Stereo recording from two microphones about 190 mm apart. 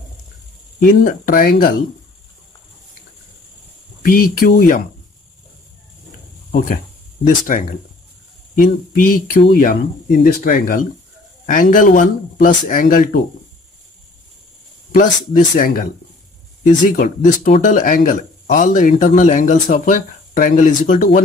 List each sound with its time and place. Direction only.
1.0 s speech: 45° left (ahead or behind)
4.1 s speech: 50° left (ahead or behind)
7.2 s speech: 45° left (ahead or behind)
14.9 s speech: 45° left (ahead or behind)